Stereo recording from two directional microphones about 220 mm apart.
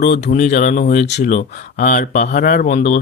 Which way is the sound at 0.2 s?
35° left (ahead or behind).